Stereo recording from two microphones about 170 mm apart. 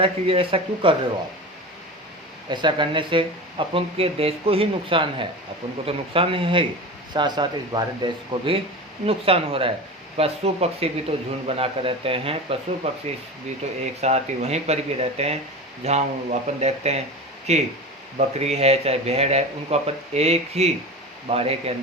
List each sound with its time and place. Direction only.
0.0 s speech: 35° right (ahead or behind)
2.5 s speech: 25° right (ahead or behind)